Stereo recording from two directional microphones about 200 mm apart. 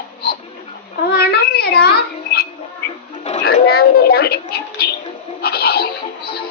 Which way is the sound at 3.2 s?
35° left (ahead or behind).